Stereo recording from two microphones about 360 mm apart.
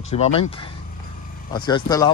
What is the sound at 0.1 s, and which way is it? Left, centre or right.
Speech, centre.